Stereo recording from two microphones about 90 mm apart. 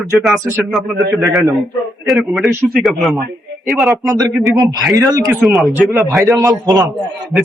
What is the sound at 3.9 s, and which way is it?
A man's voice, 35° right (ahead or behind).